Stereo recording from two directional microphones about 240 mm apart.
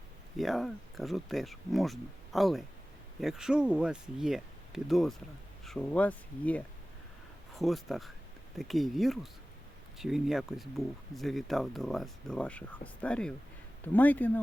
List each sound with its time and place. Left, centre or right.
0.3 s speech: centre